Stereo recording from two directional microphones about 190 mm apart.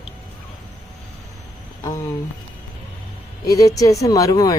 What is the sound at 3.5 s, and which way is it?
Speech, 20° left (ahead or behind).